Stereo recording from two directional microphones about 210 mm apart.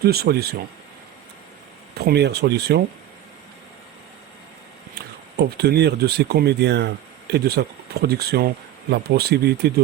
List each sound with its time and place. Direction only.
0.0 s speech: 50° right (ahead or behind)
2.0 s speech: 50° right (ahead or behind)
4.9 s speech: 50° right (ahead or behind)